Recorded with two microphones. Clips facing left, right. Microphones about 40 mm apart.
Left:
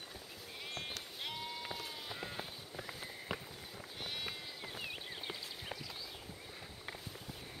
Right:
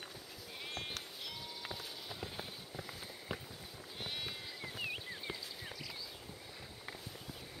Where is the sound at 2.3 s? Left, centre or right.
Centre.